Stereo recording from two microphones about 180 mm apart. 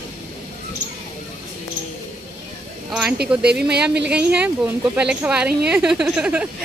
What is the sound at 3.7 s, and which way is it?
Speech, 65° right (ahead or behind).